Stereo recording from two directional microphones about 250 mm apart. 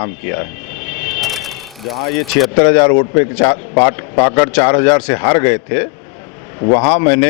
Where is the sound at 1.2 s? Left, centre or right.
Centre.